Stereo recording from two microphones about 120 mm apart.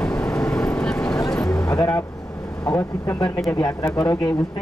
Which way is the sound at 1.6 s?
30° left (ahead or behind).